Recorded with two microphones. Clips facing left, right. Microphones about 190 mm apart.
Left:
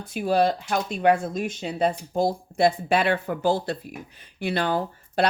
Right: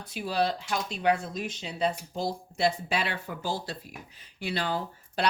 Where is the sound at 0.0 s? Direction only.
50° left (ahead or behind).